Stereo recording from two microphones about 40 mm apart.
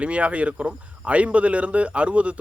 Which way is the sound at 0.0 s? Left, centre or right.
Right.